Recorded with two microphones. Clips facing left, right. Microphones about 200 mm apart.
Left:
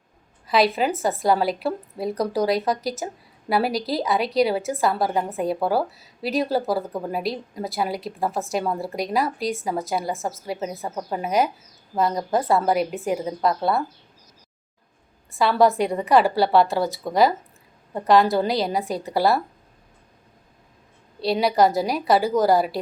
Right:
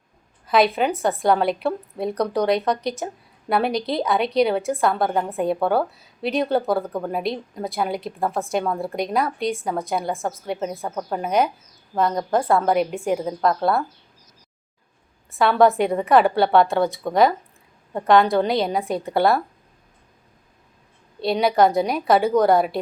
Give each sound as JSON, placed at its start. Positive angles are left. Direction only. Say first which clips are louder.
{"t": 0.4, "sound": "a woman's voice", "louder": "right 1 dB", "side_deg": 0}
{"t": 15.3, "sound": "a woman's voice", "louder": "right 2 dB", "side_deg": 0}
{"t": 21.2, "sound": "a woman's voice", "louder": "right 1 dB", "side_deg": 0}